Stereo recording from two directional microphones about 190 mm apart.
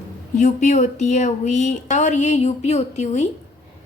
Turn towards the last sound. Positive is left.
turn(degrees=35)  # may be behind; listen again after turning